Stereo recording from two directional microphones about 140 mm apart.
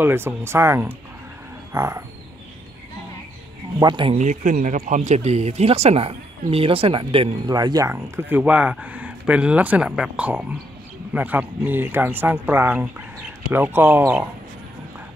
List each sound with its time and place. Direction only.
0.0 s speech: 15° right (ahead or behind)
3.8 s speech: 35° right (ahead or behind)
4.2 s speech: 60° right (ahead or behind); by 7.3 s 40° right (ahead or behind)
7.4 s speech: 30° right (ahead or behind)
7.9 s speech: 15° right (ahead or behind)